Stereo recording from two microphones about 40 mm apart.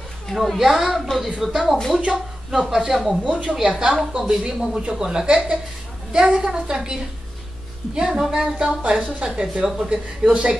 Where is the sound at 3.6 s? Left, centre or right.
Right.